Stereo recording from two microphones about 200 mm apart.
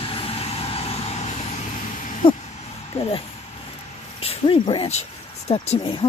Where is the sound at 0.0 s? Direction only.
30° left (ahead or behind).